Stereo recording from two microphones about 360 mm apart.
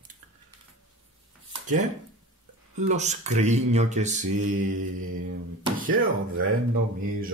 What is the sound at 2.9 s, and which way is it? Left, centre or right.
Mantra, centre.